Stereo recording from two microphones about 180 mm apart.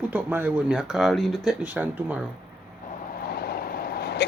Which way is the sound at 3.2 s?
60° left (ahead or behind).